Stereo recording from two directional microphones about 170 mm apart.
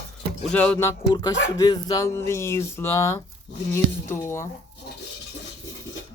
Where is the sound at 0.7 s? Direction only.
20° left (ahead or behind).